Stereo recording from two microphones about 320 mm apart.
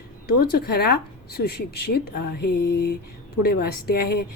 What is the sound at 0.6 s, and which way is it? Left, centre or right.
A woman's voice, left.